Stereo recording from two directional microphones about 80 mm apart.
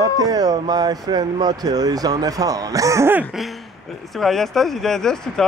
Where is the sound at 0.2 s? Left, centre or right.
Right.